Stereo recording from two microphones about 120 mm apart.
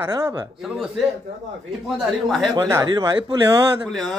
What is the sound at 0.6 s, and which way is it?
Speech, 5° right (ahead or behind).